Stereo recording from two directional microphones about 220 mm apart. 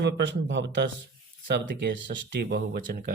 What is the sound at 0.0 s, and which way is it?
A man's voice, 55° right (ahead or behind).